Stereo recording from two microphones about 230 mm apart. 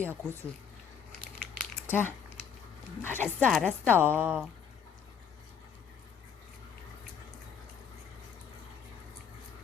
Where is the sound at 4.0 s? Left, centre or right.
Centre.